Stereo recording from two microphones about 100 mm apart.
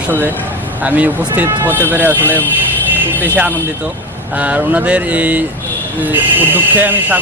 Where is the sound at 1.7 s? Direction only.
20° left (ahead or behind).